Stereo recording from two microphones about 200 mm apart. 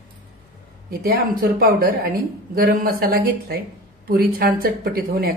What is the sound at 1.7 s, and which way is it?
A woman's voice, 50° right (ahead or behind).